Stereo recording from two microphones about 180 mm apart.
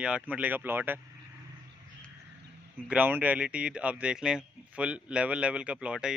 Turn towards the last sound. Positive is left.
turn(degrees=-5)  # may be behind; listen again after turning